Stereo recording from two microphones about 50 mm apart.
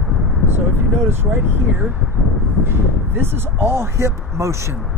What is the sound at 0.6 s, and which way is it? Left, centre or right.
Speech, right.